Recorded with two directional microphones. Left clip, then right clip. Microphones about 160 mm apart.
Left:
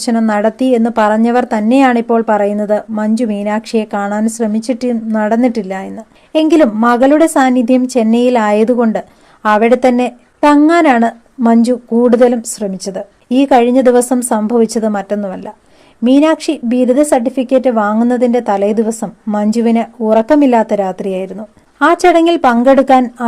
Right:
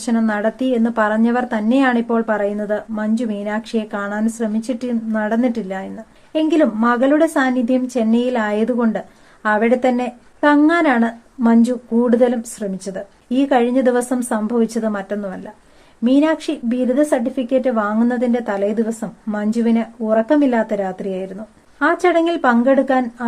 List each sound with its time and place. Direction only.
0.0 s a woman's voice: 35° left (ahead or behind)